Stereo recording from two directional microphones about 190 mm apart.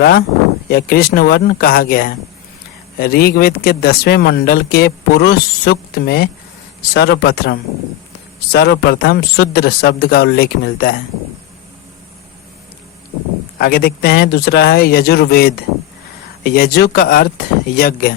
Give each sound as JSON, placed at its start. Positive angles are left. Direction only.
{"t": 0.0, "sound": "a man's voice", "side_deg": 55}
{"t": 13.6, "sound": "a man's voice", "side_deg": 55}